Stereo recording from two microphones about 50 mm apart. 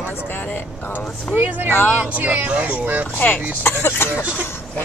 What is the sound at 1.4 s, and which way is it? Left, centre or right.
Speech, right.